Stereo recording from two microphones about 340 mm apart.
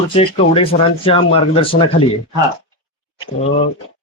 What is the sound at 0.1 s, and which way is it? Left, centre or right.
Speech, centre.